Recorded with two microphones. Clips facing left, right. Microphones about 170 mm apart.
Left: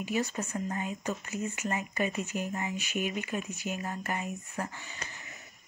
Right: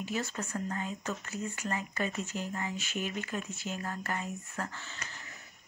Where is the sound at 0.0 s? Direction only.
15° left (ahead or behind).